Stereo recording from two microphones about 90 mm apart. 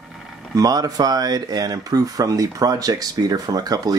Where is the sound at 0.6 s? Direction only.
45° right (ahead or behind).